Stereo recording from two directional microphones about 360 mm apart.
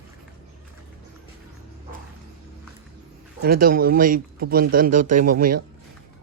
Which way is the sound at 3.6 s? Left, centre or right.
Right.